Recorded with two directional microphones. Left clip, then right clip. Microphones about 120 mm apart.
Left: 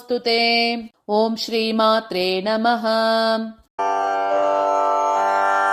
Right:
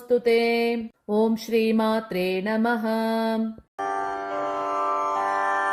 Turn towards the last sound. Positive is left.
turn(degrees=25)  # may be behind; listen again after turning